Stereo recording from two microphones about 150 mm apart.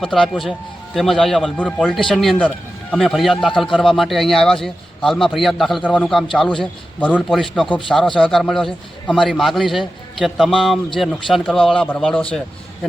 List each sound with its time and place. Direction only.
0.0 s a man's voice: 5° left (ahead or behind)